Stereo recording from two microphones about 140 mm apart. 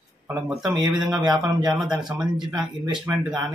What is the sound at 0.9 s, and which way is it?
Speech, 5° right (ahead or behind).